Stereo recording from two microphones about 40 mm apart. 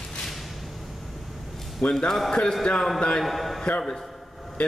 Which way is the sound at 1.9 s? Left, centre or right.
Centre.